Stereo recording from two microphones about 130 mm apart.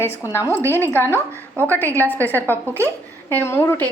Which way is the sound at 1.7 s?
15° left (ahead or behind).